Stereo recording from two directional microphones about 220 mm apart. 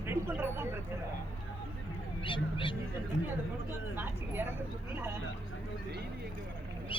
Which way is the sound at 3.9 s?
10° right (ahead or behind).